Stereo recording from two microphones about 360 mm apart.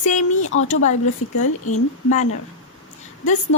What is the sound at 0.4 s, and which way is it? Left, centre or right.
Speech, left.